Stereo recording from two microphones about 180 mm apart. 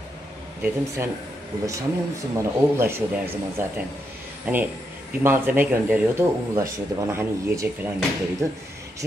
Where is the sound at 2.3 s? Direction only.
15° right (ahead or behind).